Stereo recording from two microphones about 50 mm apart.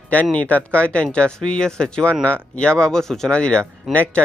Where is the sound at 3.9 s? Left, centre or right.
Centre.